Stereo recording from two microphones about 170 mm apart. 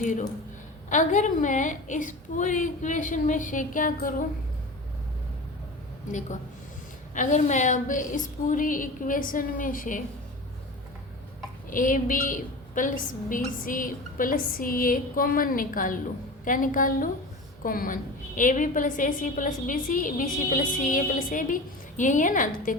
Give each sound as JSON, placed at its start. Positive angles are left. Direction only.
{"t": 0.0, "sound": "a woman's voice", "side_deg": 45}
{"t": 6.1, "sound": "a woman's voice", "side_deg": 45}
{"t": 11.7, "sound": "a woman's voice", "side_deg": 50}